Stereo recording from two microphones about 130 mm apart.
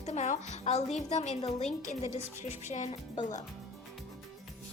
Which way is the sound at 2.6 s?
65° left (ahead or behind).